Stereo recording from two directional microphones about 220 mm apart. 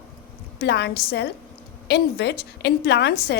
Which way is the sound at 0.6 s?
50° left (ahead or behind).